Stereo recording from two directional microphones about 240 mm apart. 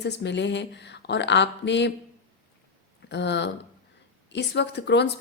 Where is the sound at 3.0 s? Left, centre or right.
Left.